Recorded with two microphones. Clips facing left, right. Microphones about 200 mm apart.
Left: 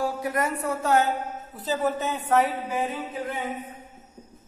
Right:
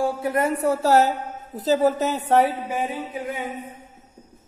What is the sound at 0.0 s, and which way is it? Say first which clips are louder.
A woman's voice: right 4 dB; 25° right (ahead or behind).